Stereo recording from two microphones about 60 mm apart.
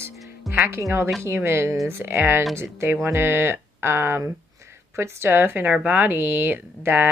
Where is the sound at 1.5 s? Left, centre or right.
Right.